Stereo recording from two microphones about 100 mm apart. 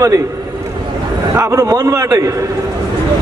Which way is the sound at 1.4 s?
30° right (ahead or behind).